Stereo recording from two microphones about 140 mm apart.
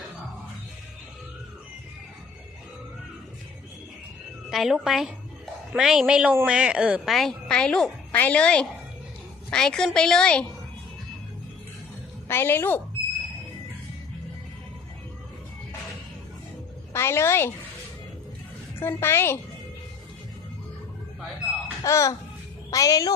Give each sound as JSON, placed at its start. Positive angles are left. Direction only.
{"t": 4.4, "sound": "a woman's voice", "side_deg": 0}
{"t": 12.3, "sound": "a woman's voice", "side_deg": 15}
{"t": 16.9, "sound": "a woman's voice", "side_deg": 20}
{"t": 18.8, "sound": "a woman's voice", "side_deg": 15}
{"t": 21.8, "sound": "a woman's voice", "side_deg": 20}